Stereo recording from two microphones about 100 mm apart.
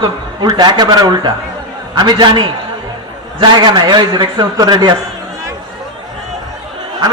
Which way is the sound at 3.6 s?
50° right (ahead or behind).